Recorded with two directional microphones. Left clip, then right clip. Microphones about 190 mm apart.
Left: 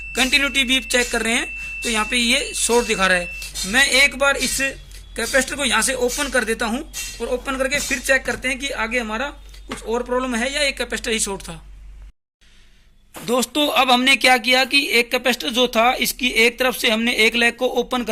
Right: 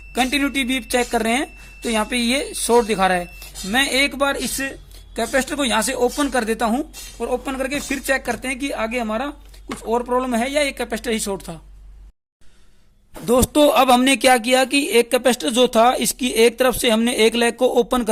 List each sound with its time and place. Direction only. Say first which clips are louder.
0.1 s speech: left 2 dB; 40° right (ahead or behind)
13.2 s speech: right 5 dB; 40° right (ahead or behind)